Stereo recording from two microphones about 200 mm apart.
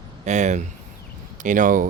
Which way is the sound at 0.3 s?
35° right (ahead or behind).